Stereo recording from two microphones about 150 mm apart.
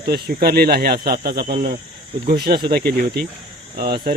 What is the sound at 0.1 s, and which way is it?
Speech, 90° right.